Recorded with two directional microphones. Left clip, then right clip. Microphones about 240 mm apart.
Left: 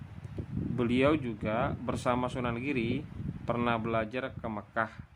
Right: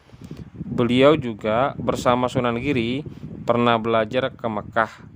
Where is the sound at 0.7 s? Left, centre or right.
Right.